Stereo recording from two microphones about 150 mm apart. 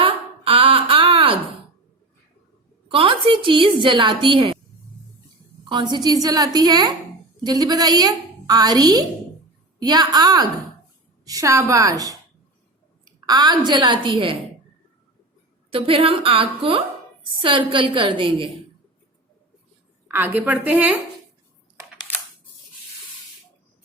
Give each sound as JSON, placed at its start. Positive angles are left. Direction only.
{"t": 0.0, "sound": "a sound", "side_deg": -35}
{"t": 2.9, "sound": "a woman's voice", "side_deg": -35}
{"t": 5.7, "sound": "a woman's voice", "side_deg": -30}
{"t": 13.2, "sound": "a woman's voice", "side_deg": -30}
{"t": 15.7, "sound": "a woman's voice", "side_deg": -40}
{"t": 20.1, "sound": "a woman's voice", "side_deg": -15}